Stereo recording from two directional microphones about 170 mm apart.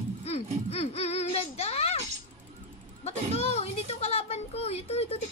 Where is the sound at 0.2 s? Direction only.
40° left (ahead or behind).